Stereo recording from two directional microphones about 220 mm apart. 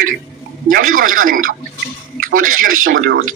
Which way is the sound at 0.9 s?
40° right (ahead or behind).